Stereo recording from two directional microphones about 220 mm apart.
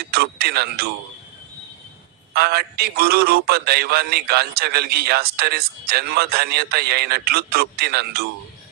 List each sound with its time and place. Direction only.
0.1 s speech: 45° right (ahead or behind)
2.3 s speech: 45° right (ahead or behind)